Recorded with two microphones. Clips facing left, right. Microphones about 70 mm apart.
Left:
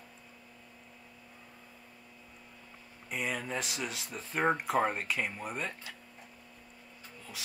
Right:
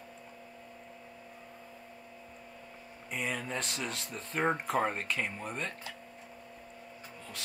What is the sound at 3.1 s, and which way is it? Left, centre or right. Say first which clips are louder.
Speech: left 1 dB; centre.